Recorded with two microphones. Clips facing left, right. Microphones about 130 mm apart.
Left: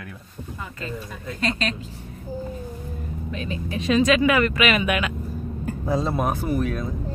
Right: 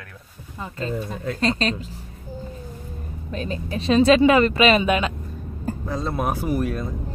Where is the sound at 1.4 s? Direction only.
35° right (ahead or behind).